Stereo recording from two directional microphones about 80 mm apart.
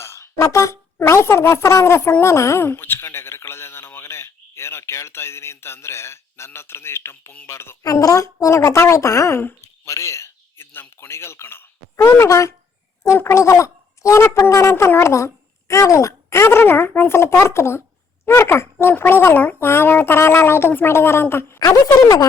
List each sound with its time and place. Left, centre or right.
0.0 s speech: left
7.9 s a woman's voice: left
14.3 s a child's voice: left
14.5 s a child's voice: left
21.6 s speech: left